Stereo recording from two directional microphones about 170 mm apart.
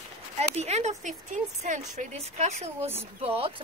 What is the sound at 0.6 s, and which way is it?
A woman's voice, 40° right (ahead or behind).